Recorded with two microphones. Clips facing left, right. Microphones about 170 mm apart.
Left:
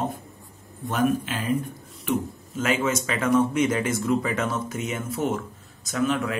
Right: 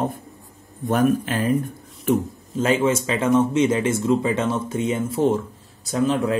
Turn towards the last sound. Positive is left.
turn(degrees=-30)  # may be behind; listen again after turning